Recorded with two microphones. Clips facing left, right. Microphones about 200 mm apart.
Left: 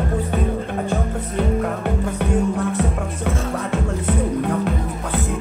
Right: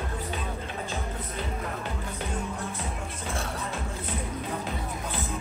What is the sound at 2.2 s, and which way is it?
Music, 75° left (ahead or behind).